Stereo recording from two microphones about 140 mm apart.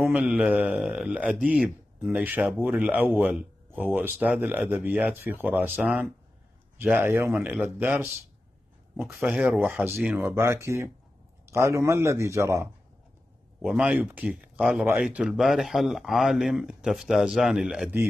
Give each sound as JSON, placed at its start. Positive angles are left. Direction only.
{"t": 0.1, "sound": "a man's voice", "side_deg": -10}
{"t": 9.1, "sound": "a man's voice", "side_deg": -5}
{"t": 13.6, "sound": "a man's voice", "side_deg": -5}